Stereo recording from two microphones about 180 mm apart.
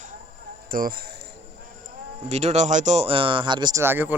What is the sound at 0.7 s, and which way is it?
Speech, 55° right (ahead or behind).